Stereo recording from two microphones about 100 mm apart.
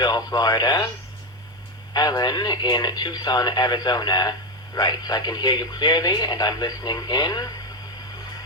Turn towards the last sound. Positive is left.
turn(degrees=40)  # may be behind; listen again after turning